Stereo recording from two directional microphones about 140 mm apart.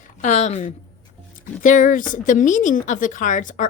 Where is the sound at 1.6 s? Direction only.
65° left (ahead or behind).